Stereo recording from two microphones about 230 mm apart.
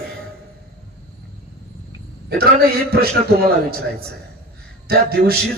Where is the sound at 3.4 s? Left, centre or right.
Right.